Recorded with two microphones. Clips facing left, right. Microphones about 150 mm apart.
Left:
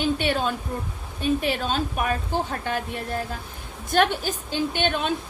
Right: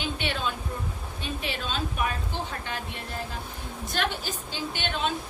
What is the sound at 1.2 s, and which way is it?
A woman's voice, 45° left (ahead or behind).